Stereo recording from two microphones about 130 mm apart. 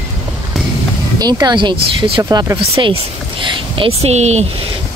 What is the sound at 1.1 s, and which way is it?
Speech, 30° right (ahead or behind).